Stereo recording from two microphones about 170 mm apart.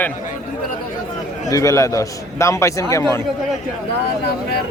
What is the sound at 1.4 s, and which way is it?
A man's voice, 20° left (ahead or behind).